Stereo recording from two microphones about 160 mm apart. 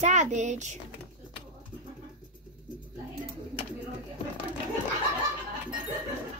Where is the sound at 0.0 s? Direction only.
50° right (ahead or behind).